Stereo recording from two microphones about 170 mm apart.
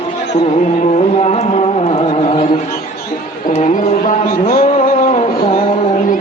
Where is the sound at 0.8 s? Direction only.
40° left (ahead or behind).